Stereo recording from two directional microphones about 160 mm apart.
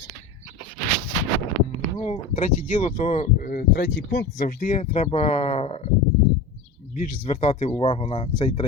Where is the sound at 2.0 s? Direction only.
45° left (ahead or behind).